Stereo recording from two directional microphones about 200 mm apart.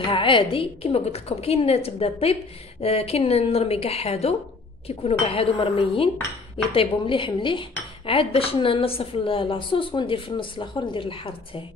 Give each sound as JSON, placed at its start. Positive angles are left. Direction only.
{"t": 0.0, "sound": "a woman's voice", "side_deg": 25}